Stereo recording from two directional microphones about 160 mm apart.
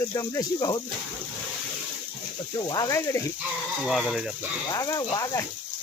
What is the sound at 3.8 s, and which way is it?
Speech, 5° right (ahead or behind).